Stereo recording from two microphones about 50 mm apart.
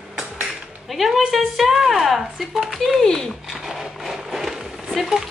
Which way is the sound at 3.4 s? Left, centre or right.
Centre.